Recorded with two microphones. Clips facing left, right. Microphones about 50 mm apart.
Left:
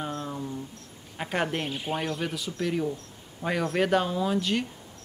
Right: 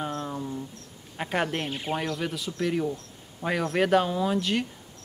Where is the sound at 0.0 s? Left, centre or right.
Centre.